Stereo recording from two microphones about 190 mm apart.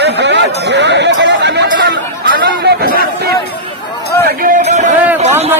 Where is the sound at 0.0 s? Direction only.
65° right (ahead or behind).